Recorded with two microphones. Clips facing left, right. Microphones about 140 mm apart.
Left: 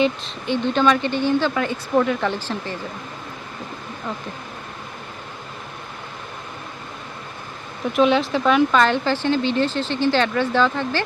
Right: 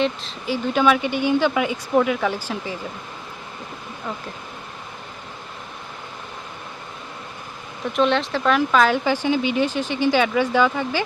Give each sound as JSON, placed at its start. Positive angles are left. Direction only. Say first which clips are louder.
{"t": 0.0, "sound": "speech", "louder": "left 2 dB", "side_deg": 0}
{"t": 7.9, "sound": "speech", "louder": "left 2 dB", "side_deg": 5}